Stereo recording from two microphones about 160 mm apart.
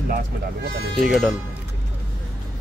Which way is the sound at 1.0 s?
5° right (ahead or behind).